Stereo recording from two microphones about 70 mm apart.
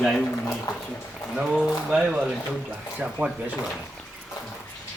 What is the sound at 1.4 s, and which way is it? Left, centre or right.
Speech, centre.